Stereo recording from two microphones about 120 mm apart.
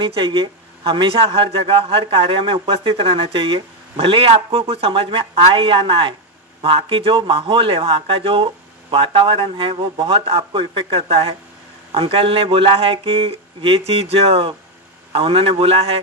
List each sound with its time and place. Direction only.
0.0 s a man's voice: 45° right (ahead or behind)